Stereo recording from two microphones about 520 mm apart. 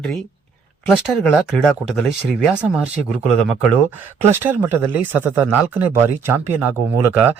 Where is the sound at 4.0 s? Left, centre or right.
Centre.